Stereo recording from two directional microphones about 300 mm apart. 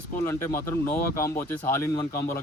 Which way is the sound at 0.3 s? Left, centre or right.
Centre.